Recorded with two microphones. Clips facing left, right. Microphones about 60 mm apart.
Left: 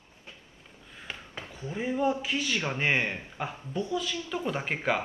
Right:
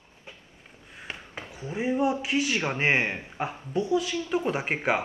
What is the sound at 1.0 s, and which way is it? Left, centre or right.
A man's voice, centre.